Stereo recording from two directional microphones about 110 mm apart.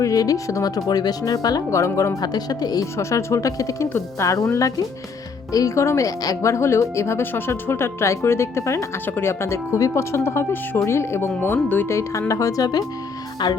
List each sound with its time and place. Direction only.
0.0 s speech: 30° left (ahead or behind)